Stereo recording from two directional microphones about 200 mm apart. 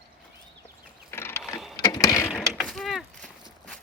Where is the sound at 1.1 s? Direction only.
10° left (ahead or behind).